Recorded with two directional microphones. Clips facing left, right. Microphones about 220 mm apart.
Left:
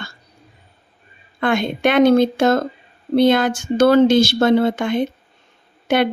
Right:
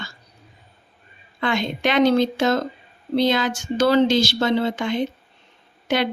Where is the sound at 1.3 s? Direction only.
55° left (ahead or behind).